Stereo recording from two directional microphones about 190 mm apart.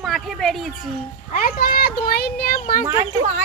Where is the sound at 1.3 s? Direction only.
50° left (ahead or behind).